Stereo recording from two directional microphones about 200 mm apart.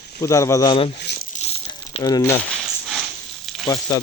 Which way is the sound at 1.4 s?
30° left (ahead or behind).